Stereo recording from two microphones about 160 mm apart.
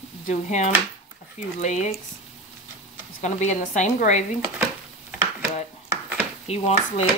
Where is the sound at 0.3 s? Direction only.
45° left (ahead or behind).